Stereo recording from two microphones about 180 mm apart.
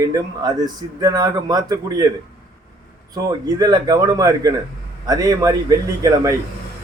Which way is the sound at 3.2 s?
20° right (ahead or behind).